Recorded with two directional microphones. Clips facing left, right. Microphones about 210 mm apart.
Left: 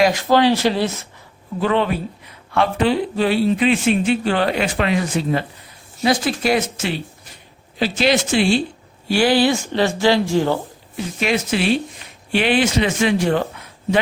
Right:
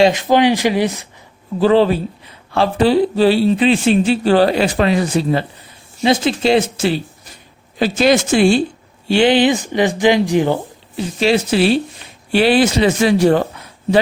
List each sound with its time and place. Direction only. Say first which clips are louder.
0.0 s speech: right 3 dB; 20° right (ahead or behind)
1.5 s speech: right 7 dB; 35° right (ahead or behind)
7.8 s speech: right 4 dB; 45° right (ahead or behind)
9.0 s speech: right 3 dB; 20° right (ahead or behind)
10.9 s speech: right 5 dB; 30° right (ahead or behind)